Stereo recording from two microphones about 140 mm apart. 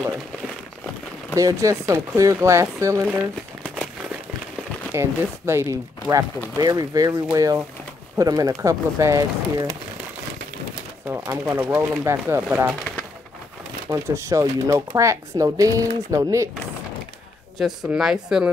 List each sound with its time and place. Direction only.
1.3 s speech: 20° right (ahead or behind)
4.9 s speech: 20° right (ahead or behind)
11.2 s speech: 20° right (ahead or behind)
12.4 s speech: 10° right (ahead or behind)
13.8 s speech: 20° right (ahead or behind)
17.6 s a woman's voice: 5° right (ahead or behind)